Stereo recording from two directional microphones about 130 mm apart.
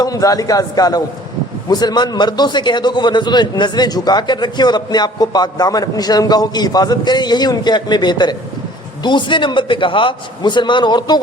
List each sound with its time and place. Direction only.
0.0 s a man's voice: 25° left (ahead or behind)